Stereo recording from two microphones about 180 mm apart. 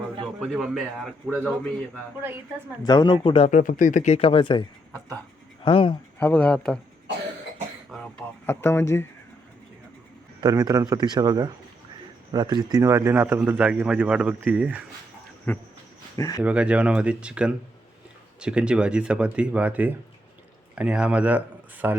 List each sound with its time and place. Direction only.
0.3 s speech: centre (ahead or behind)
2.8 s speech: 20° left (ahead or behind)
5.6 s speech: 30° left (ahead or behind)
6.1 s speech: 10° left (ahead or behind)
7.9 s a sound: centre (ahead or behind)
8.6 s speech: 15° left (ahead or behind)
10.4 s a man's voice: 20° right (ahead or behind)
15.5 s speech: 10° left (ahead or behind)
16.1 s speech: 20° left (ahead or behind)
16.4 s speech: 5° right (ahead or behind)